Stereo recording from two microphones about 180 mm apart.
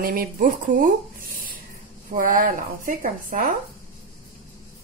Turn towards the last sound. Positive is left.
turn(degrees=-50)  # may be behind; listen again after turning